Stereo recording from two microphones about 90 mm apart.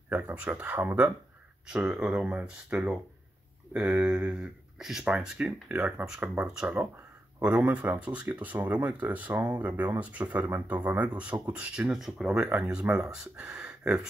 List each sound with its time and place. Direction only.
0.6 s speech: 20° right (ahead or behind)
1.7 s speech: 10° right (ahead or behind)
4.7 s speech: 5° right (ahead or behind)